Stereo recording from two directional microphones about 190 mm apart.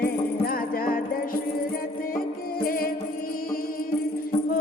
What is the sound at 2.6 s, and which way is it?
Music, 50° left (ahead or behind).